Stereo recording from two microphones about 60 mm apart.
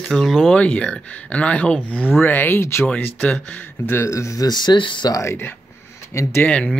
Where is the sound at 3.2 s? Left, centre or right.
Centre.